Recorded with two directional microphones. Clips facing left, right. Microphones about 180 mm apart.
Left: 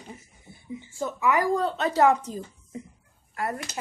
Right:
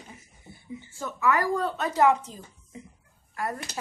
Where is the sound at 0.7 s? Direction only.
15° left (ahead or behind).